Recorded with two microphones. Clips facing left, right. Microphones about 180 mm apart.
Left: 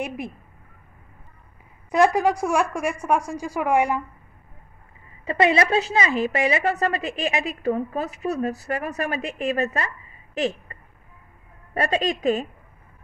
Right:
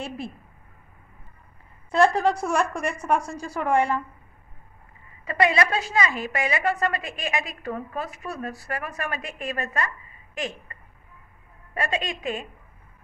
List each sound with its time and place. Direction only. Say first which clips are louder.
1.9 s a woman's voice: left 1 dB; 15° left (ahead or behind)
5.2 s a woman's voice: left 3 dB; 25° left (ahead or behind)
11.7 s a woman's voice: left 5 dB; 40° left (ahead or behind)